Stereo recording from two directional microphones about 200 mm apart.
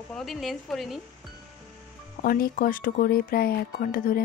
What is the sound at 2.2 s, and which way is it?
Speech, 50° left (ahead or behind).